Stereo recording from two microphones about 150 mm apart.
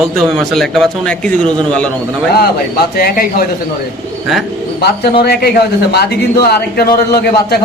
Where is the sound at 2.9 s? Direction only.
80° left.